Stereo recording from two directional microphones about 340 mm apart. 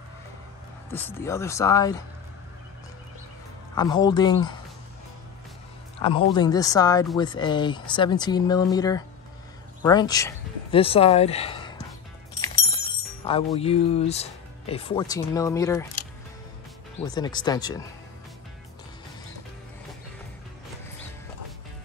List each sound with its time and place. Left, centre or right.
0.9 s speech: centre
3.7 s speech: centre
5.9 s speech: centre
13.2 s speech: centre
17.0 s speech: centre